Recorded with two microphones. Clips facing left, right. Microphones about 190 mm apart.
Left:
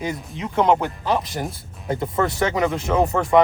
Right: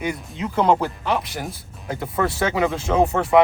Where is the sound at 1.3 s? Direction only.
Centre (ahead or behind).